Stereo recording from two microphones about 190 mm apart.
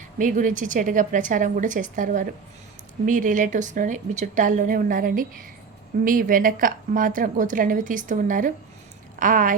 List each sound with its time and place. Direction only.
0.2 s a woman's voice: 45° right (ahead or behind)